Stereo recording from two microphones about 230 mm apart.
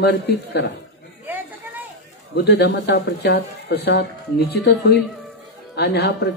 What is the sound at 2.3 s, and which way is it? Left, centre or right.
Speech, left.